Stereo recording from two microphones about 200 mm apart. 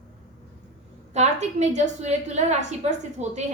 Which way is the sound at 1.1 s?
35° right (ahead or behind).